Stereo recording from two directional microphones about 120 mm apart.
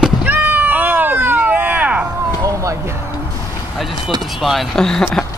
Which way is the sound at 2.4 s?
25° right (ahead or behind).